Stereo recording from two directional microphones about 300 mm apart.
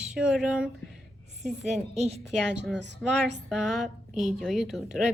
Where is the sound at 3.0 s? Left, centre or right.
Centre.